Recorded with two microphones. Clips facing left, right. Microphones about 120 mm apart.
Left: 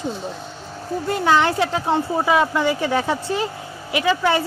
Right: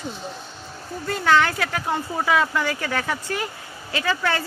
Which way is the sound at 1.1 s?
20° left (ahead or behind).